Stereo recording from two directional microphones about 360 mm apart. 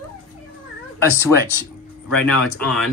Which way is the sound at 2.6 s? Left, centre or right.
Centre.